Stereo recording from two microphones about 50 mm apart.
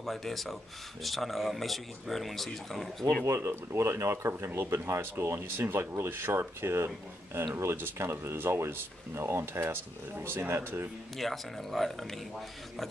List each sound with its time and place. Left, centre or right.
0.0 s speech: centre
3.3 s speech: right
11.1 s speech: centre